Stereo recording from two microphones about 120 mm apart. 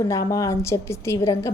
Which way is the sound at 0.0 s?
25° left (ahead or behind).